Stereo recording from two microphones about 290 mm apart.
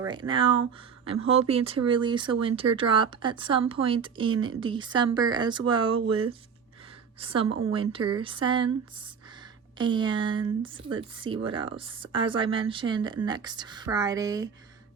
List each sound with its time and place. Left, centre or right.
0.0 s speech: centre
7.2 s speech: centre
9.7 s speech: centre